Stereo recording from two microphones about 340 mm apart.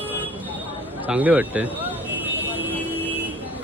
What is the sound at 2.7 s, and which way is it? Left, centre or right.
Vehicle, centre.